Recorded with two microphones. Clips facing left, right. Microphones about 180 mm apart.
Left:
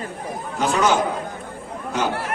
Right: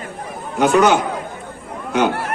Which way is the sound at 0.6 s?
65° right (ahead or behind).